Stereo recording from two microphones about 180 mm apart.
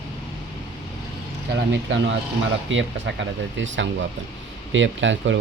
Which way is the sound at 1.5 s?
80° right.